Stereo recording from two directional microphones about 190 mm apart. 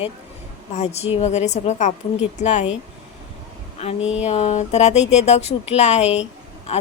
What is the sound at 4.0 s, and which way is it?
Speech, 5° right (ahead or behind).